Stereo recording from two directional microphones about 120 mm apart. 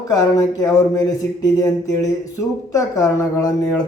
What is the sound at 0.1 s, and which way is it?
Speech, 30° left (ahead or behind).